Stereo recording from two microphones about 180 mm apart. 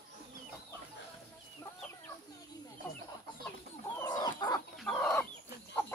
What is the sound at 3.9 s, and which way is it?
Chicken, 20° left (ahead or behind).